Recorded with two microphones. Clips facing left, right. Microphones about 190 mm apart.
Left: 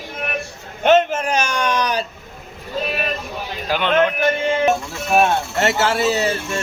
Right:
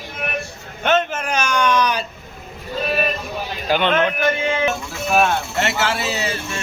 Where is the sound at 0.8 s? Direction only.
35° left (ahead or behind).